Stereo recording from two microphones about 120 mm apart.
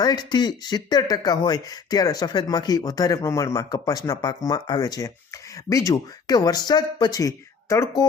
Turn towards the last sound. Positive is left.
turn(degrees=25)  # may be behind; listen again after turning